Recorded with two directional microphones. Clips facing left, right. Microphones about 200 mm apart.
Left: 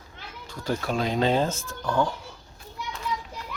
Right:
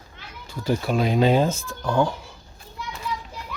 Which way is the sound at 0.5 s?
5° right (ahead or behind).